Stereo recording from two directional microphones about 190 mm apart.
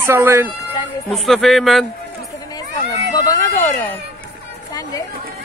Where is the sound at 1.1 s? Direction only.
Centre (ahead or behind).